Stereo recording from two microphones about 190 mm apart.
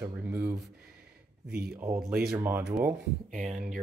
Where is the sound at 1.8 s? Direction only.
15° right (ahead or behind).